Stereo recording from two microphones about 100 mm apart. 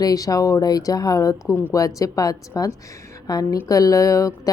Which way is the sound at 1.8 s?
35° left (ahead or behind).